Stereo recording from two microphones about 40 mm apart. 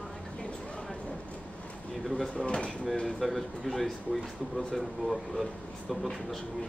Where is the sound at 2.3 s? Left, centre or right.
Left.